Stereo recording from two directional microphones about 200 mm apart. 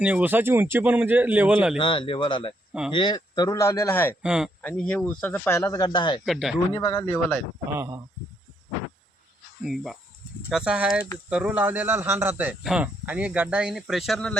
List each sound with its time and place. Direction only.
0.0 s speech: 10° right (ahead or behind)
1.8 s speech: 25° left (ahead or behind)
4.2 s speech: 5° right (ahead or behind); by 6.2 s 25° left (ahead or behind)
6.2 s speech: centre (ahead or behind)
6.7 s speech: 20° left (ahead or behind)
7.8 s speech: 15° right (ahead or behind)
9.6 s speech: centre (ahead or behind)